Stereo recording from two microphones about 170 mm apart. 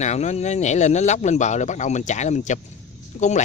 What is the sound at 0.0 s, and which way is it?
Speech, 40° left (ahead or behind).